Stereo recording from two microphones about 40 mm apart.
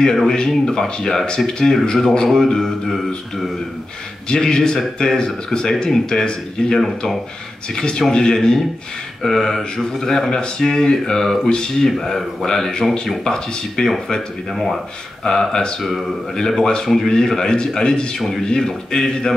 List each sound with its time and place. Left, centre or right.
0.1 s speech: centre
0.4 s speech: centre
4.3 s speech: centre
15.2 s speech: centre